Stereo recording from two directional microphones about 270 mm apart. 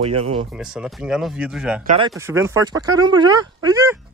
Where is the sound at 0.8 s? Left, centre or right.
Centre.